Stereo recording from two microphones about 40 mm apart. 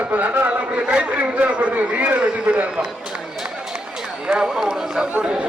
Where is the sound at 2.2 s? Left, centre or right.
Right.